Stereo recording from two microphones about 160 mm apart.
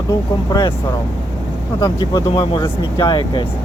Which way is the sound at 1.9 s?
25° left (ahead or behind).